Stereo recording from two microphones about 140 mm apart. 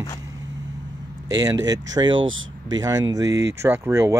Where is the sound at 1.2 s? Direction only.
25° right (ahead or behind).